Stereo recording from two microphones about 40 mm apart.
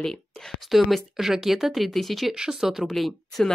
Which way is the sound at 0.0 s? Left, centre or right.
Centre.